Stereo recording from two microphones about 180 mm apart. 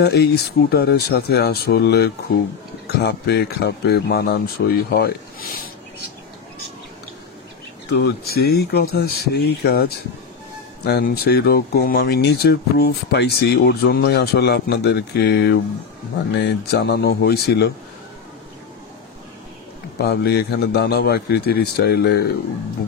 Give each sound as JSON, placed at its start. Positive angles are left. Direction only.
{"t": 0.0, "sound": "speech", "side_deg": 65}
{"t": 7.9, "sound": "speech", "side_deg": 60}
{"t": 10.9, "sound": "speech", "side_deg": 60}
{"t": 20.0, "sound": "speech", "side_deg": 60}